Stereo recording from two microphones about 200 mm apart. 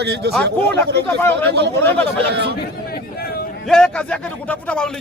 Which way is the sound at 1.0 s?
10° left (ahead or behind).